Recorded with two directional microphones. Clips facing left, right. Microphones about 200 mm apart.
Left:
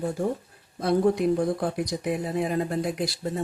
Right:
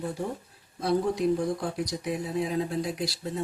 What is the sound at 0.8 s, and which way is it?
Speech, 55° left (ahead or behind).